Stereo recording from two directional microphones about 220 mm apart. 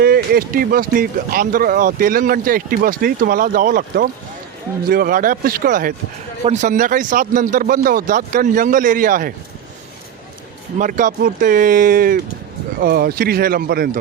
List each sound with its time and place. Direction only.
0.0 s speech: 45° right (ahead or behind)
10.8 s speech: 35° right (ahead or behind)